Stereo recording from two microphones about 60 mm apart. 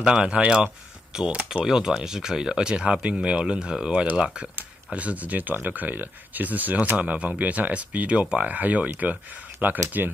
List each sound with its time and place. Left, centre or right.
0.0 s speech: centre